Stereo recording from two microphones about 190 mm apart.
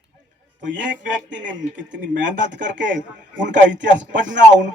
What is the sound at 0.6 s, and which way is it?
A man's voice, 70° right (ahead or behind).